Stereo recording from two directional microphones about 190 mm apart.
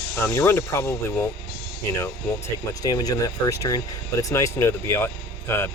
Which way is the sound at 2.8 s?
20° left (ahead or behind).